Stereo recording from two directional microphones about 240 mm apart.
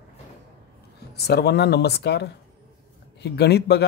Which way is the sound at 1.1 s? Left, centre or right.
Left.